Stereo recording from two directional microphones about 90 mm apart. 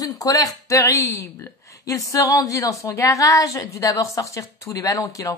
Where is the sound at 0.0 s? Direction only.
40° left (ahead or behind).